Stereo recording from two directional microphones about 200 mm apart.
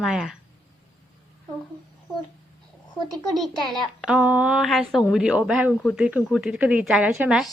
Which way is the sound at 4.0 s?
5° right (ahead or behind).